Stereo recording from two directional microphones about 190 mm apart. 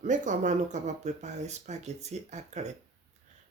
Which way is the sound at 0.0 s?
40° right (ahead or behind).